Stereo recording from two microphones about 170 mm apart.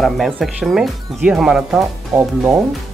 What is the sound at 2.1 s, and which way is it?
Speech, 15° right (ahead or behind).